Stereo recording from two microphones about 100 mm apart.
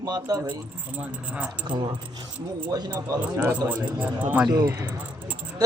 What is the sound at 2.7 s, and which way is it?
Speech, 40° right (ahead or behind).